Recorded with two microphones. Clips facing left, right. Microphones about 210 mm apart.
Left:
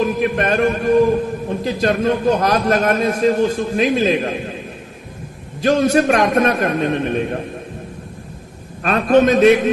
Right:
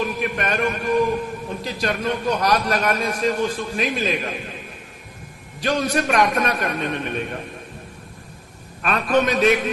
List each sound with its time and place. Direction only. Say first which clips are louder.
0.0 s a man's voice: left 7 dB; 45° left (ahead or behind)
6.1 s a man's voice: left 5 dB; 45° left (ahead or behind)
8.8 s a man's voice: left 6 dB; 45° left (ahead or behind)